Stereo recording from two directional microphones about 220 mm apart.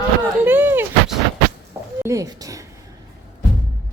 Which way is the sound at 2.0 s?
15° right (ahead or behind).